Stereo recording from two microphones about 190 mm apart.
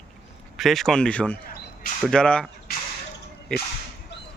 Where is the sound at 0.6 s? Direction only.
Centre (ahead or behind).